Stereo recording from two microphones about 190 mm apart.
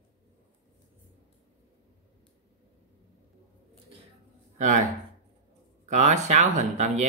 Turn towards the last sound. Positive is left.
turn(degrees=-40)  # may be behind; listen again after turning